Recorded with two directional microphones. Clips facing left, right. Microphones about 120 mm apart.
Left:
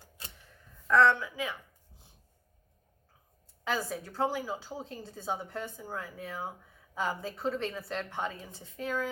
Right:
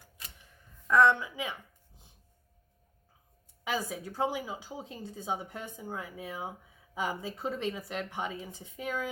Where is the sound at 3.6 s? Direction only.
15° right (ahead or behind).